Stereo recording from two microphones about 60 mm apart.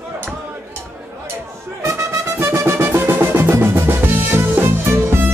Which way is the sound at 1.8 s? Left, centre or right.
Right.